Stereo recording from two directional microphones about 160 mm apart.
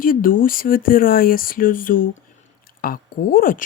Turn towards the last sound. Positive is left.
turn(degrees=60)  # may be behind; listen again after turning